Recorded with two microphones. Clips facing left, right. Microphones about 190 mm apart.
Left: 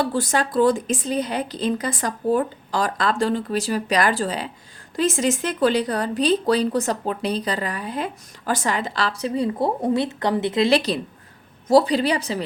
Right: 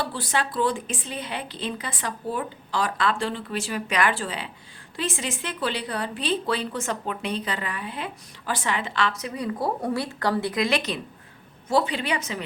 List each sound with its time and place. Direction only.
0.0 s speech: 45° left (ahead or behind)